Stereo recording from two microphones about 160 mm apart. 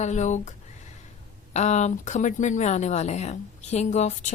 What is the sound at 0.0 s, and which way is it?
Speech, 45° left (ahead or behind).